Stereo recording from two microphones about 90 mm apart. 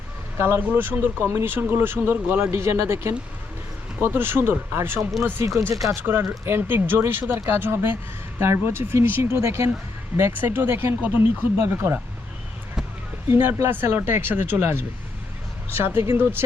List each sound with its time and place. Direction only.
0.3 s speech: 25° right (ahead or behind)
6.0 s speech: 25° right (ahead or behind)
13.3 s speech: 30° right (ahead or behind)